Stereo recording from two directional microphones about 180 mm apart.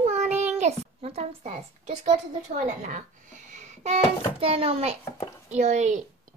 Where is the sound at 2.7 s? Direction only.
45° right (ahead or behind).